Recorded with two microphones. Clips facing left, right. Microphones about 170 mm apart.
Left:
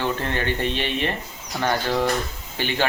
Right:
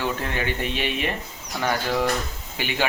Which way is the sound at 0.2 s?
10° right (ahead or behind).